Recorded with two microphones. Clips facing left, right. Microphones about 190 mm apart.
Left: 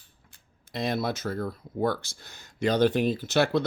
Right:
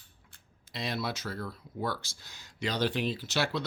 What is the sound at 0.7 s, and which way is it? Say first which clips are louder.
Speech: left 6 dB; 50° left (ahead or behind).